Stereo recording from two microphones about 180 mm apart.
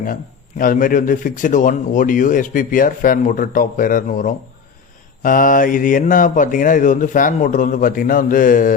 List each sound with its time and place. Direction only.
0.6 s a man's voice: 50° left (ahead or behind)